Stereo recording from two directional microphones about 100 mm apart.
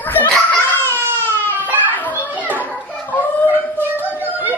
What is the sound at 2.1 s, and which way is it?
Children playing, 15° right (ahead or behind).